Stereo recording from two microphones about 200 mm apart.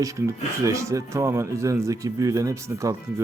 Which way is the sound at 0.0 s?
15° right (ahead or behind).